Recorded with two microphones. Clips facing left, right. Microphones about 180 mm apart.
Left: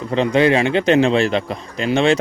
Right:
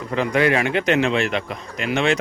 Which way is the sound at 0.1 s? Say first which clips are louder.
Left 4 dB; 25° left (ahead or behind).